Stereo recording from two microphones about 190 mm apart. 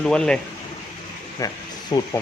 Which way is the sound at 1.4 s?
20° left (ahead or behind).